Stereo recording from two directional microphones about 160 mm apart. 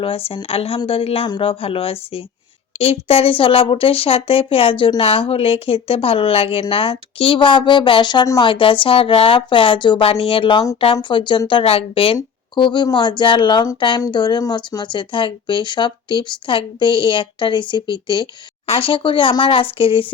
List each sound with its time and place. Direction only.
0.0 s speech: 35° left (ahead or behind)